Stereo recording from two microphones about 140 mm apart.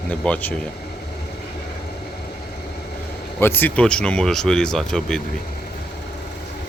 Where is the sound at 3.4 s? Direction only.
15° left (ahead or behind).